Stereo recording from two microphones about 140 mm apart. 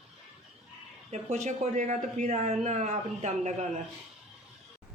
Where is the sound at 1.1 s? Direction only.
55° right (ahead or behind).